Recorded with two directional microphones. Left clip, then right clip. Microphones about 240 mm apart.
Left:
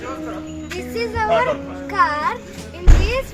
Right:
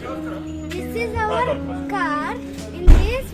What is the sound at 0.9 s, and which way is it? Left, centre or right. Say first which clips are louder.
Music: left 3 dB; centre.